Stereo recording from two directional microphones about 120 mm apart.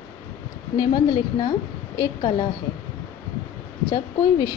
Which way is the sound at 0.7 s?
35° left (ahead or behind).